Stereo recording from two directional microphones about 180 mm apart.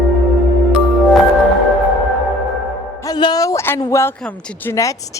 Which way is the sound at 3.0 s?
25° left (ahead or behind).